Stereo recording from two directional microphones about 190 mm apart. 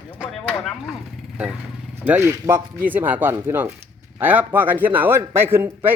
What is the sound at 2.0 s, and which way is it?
A man's voice, 10° right (ahead or behind).